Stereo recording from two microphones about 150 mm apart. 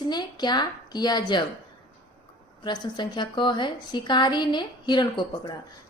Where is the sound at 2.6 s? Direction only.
30° left (ahead or behind).